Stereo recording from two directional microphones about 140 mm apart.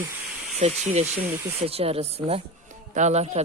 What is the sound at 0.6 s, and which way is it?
Speech, 50° right (ahead or behind).